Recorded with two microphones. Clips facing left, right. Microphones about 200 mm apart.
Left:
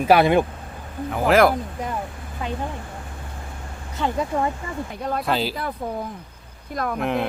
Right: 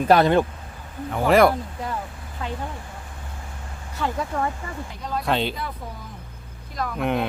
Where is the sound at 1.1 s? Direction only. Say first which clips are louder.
Even; centre (ahead or behind).